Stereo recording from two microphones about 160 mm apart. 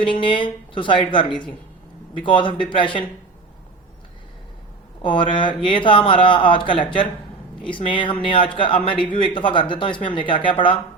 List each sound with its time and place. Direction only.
0.0 s speech: 30° left (ahead or behind)
5.0 s speech: 30° left (ahead or behind)